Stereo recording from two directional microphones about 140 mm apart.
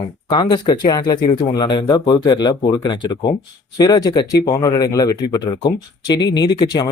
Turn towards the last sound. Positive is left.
turn(degrees=30)  # may be behind; listen again after turning